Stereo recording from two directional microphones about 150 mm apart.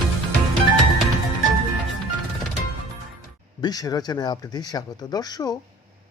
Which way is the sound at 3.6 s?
25° left (ahead or behind).